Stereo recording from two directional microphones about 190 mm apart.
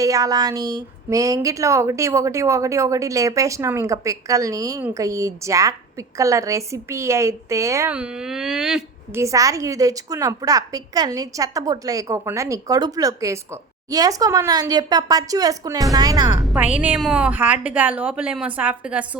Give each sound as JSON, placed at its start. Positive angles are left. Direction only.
{"t": 0.0, "sound": "speech", "side_deg": -20}
{"t": 9.2, "sound": "a woman's voice", "side_deg": -15}
{"t": 16.4, "sound": "speech", "side_deg": -5}